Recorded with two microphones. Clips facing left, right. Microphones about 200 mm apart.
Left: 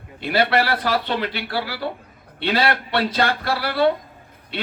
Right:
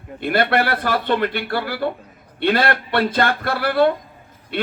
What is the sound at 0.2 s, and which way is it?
A man's voice, 50° right (ahead or behind).